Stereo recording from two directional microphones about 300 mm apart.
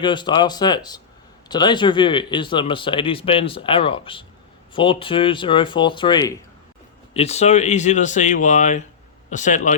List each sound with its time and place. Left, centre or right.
0.0 s speech: centre